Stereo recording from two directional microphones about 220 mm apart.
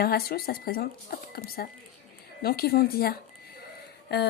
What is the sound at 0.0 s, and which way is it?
Speech, 45° left (ahead or behind).